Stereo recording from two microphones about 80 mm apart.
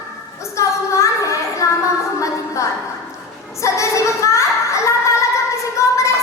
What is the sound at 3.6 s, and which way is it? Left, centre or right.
Child singing, left.